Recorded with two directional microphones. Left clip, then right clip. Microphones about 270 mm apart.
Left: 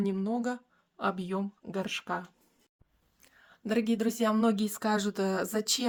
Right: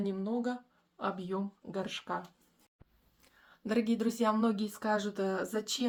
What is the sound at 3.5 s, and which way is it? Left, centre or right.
Speech, left.